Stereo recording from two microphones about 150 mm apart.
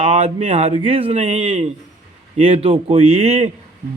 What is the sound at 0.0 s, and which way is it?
Speech, 45° right (ahead or behind).